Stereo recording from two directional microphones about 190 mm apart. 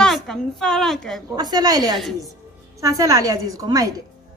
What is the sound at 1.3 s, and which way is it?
A woman's voice, 20° right (ahead or behind).